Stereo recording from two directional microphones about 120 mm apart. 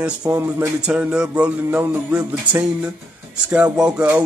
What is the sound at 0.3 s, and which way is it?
Speech, 20° right (ahead or behind).